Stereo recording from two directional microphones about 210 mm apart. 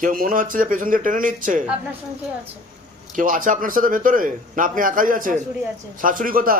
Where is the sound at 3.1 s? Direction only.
40° right (ahead or behind).